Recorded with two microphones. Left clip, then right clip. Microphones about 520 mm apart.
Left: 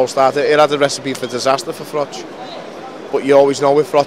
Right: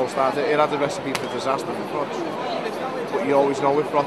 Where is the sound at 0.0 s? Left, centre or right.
Left.